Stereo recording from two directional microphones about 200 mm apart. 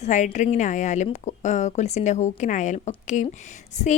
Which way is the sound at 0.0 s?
35° left (ahead or behind).